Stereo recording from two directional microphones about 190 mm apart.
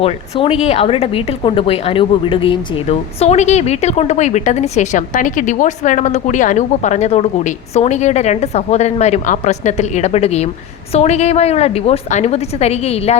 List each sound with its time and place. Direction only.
0.0 s speech: 30° left (ahead or behind)